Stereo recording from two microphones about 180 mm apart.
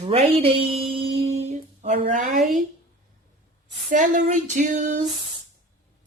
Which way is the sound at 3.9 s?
45° right (ahead or behind).